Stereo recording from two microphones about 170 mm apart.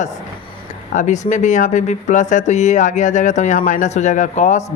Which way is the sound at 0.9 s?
45° left (ahead or behind).